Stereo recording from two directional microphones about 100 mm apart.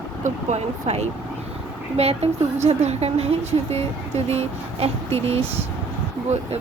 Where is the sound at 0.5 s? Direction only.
90° right.